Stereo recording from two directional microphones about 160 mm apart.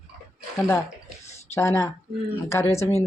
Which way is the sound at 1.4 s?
15° left (ahead or behind).